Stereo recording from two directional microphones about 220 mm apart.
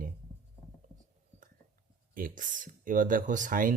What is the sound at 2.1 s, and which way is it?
Speech, 40° right (ahead or behind).